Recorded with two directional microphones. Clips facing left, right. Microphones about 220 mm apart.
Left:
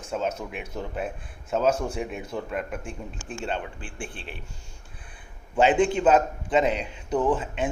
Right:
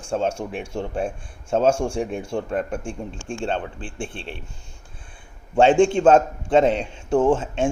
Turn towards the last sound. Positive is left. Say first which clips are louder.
# right 5 dB
turn(degrees=-25)  # may be behind; listen again after turning